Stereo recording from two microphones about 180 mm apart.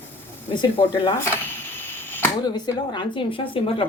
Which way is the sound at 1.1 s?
15° left (ahead or behind).